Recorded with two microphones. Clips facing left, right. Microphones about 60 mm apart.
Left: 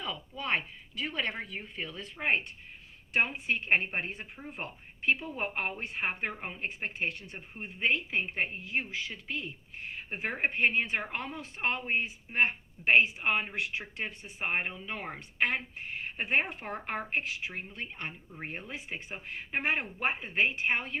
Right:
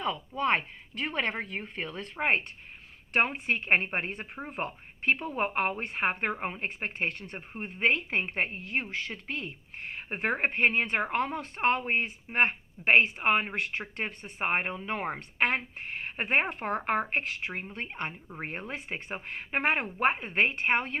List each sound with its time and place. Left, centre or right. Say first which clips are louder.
0.0 s a woman's voice: right 8 dB; right